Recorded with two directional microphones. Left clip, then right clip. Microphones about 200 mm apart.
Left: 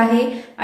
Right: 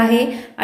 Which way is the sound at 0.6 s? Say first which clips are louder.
Right 2 dB; 45° right (ahead or behind).